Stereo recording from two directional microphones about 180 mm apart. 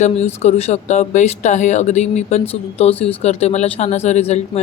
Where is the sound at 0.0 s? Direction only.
35° left (ahead or behind).